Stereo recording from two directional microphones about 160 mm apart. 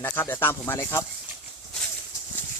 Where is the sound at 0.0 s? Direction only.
10° left (ahead or behind).